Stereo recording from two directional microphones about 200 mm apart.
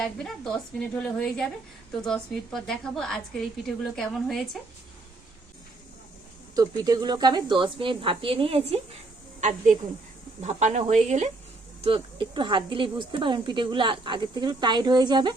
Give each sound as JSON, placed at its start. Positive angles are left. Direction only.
{"t": 0.0, "sound": "a woman's voice", "side_deg": 5}
{"t": 6.6, "sound": "speech", "side_deg": -20}